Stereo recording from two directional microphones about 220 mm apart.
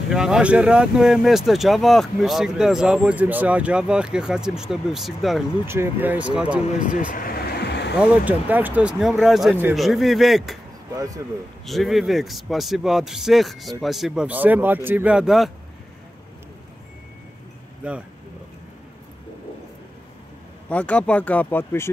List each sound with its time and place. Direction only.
0.1 s speech: 5° right (ahead or behind)
7.1 s vehicle: 40° left (ahead or behind)
8.0 s speech: 5° right (ahead or behind)
11.6 s speech: centre (ahead or behind)
17.8 s speech: 5° right (ahead or behind)
20.6 s speech: 5° left (ahead or behind)